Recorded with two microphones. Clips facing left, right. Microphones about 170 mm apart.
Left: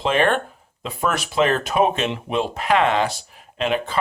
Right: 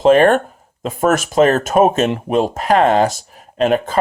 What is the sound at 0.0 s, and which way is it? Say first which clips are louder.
Speech: right 9 dB; 45° right (ahead or behind).